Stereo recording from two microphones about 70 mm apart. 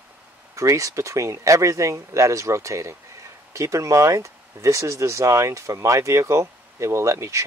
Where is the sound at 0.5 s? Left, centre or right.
Right.